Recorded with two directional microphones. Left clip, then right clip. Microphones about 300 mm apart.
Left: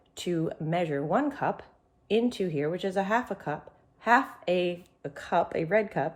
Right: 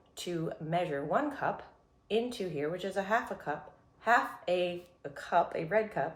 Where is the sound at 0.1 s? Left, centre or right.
Left.